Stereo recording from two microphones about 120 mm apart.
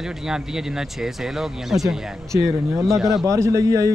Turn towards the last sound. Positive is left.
turn(degrees=-30)  # may be behind; listen again after turning